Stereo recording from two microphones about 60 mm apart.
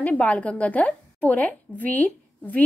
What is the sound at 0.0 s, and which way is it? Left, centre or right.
A woman's voice, left.